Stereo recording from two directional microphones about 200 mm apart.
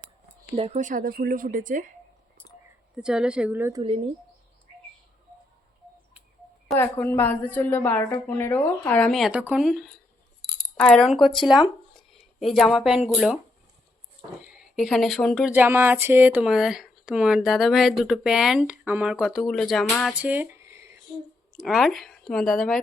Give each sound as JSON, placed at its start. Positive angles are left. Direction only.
{"t": 0.5, "sound": "a woman's voice", "side_deg": -30}
{"t": 3.0, "sound": "speech", "side_deg": -5}
{"t": 6.7, "sound": "a woman's voice", "side_deg": 10}
{"t": 14.6, "sound": "speech", "side_deg": 0}
{"t": 20.1, "sound": "a sound", "side_deg": -10}
{"t": 21.6, "sound": "speech", "side_deg": 0}